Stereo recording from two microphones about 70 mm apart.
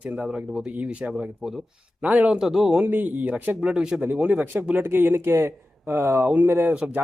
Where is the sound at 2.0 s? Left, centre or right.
Right.